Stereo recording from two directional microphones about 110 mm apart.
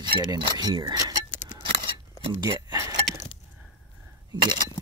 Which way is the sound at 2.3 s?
30° right (ahead or behind).